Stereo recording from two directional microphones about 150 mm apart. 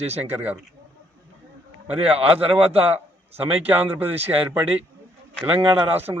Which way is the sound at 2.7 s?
40° right (ahead or behind).